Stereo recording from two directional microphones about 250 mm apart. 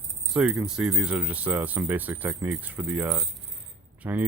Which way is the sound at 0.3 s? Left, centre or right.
Centre.